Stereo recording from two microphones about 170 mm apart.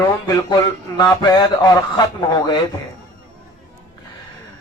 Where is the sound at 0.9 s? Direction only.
25° left (ahead or behind).